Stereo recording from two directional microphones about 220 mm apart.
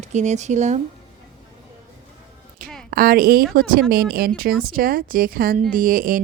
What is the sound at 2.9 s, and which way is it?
Speech, 40° right (ahead or behind).